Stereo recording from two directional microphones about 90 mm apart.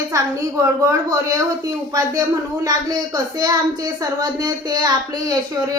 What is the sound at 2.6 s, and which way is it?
Speech, 45° right (ahead or behind).